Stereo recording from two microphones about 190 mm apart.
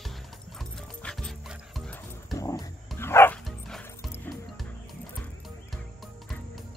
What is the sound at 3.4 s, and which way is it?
Bow-wow, centre (ahead or behind).